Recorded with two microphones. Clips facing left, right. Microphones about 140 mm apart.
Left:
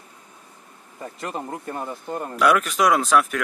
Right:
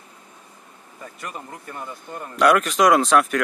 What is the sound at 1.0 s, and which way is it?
Speech, 30° left (ahead or behind).